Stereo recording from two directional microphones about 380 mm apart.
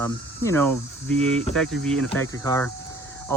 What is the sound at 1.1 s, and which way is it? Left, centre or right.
Speech, centre.